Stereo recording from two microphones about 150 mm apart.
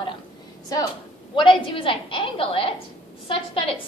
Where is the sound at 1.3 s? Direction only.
35° left (ahead or behind).